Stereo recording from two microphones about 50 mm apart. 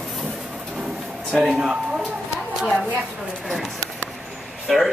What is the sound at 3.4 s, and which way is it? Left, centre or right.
Clip-clop, centre.